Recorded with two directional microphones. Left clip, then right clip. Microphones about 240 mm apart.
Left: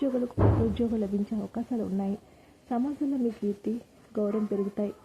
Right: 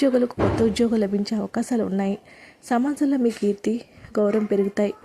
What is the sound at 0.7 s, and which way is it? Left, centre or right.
Speech, centre.